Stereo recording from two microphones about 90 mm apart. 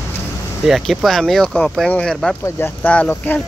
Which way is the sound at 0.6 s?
Centre (ahead or behind).